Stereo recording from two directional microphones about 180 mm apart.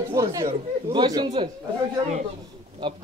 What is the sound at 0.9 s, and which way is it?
Speech, 25° right (ahead or behind).